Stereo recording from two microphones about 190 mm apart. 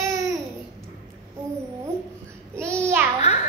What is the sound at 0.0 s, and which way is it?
Babbling, 15° right (ahead or behind).